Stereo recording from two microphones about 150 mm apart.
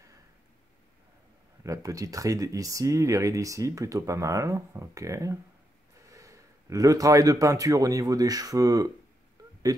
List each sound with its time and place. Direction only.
1.6 s speech: 20° right (ahead or behind)